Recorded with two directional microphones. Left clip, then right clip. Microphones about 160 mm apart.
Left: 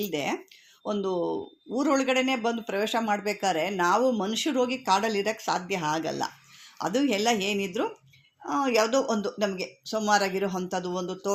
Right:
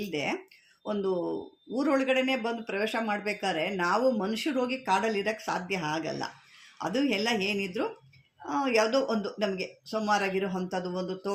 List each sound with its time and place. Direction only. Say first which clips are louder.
0.0 s a man's voice: left 2 dB; 35° left (ahead or behind)